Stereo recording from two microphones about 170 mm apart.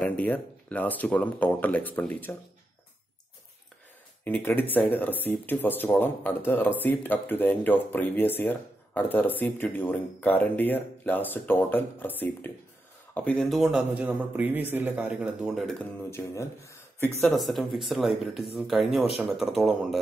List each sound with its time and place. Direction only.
0.0 s speech: 10° left (ahead or behind)
4.2 s a man's voice: 10° left (ahead or behind)
16.1 s speech: 15° left (ahead or behind)
17.3 s speech: centre (ahead or behind)